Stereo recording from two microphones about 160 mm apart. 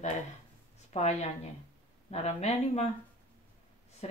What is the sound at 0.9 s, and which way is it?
Speech, 45° left (ahead or behind).